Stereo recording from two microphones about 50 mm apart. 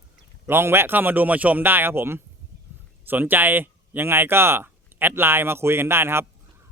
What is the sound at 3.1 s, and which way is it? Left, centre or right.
Speech, right.